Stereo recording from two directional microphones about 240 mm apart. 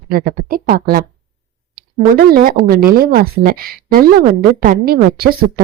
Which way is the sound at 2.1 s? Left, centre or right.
Right.